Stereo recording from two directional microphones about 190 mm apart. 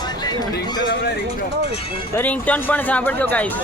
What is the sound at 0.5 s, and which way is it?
Speech, 55° left (ahead or behind).